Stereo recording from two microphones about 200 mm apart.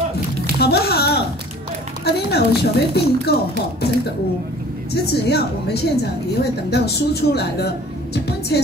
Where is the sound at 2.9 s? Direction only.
55° left (ahead or behind).